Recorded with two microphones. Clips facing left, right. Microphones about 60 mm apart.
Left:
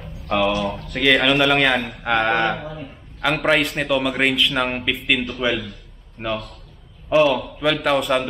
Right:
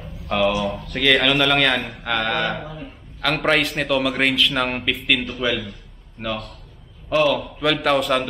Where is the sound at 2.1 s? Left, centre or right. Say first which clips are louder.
Left 4 dB; left.